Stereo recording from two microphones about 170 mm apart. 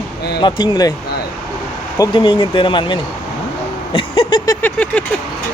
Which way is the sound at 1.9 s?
25° left (ahead or behind).